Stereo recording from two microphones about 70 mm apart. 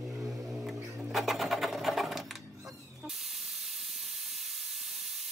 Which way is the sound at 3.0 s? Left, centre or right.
Centre.